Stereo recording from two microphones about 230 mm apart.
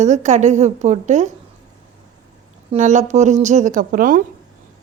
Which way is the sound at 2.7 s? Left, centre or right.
Right.